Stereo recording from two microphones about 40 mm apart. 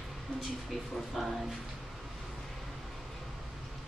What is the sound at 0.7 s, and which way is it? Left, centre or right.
Speech, centre.